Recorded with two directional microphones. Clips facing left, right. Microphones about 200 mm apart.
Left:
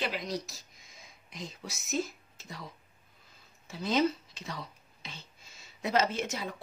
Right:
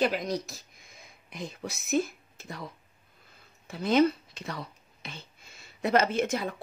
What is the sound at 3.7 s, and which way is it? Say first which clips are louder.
Speech: right 5 dB; 55° right (ahead or behind).